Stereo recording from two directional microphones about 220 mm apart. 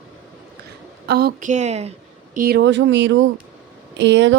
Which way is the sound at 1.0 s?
45° right (ahead or behind).